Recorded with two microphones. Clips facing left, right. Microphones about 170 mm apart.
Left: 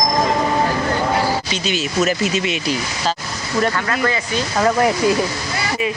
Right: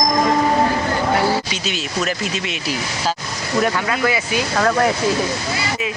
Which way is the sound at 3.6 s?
5° right (ahead or behind).